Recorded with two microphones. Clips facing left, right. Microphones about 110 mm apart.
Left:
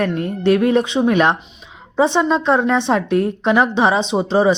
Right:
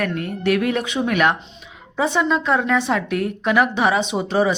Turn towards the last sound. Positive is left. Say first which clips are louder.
# left 4 dB
turn(degrees=25)  # may be behind; listen again after turning